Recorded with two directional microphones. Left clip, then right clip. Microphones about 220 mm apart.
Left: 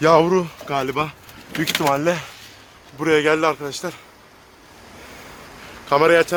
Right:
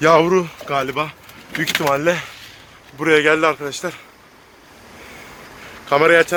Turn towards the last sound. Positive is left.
turn(degrees=5)  # may be behind; listen again after turning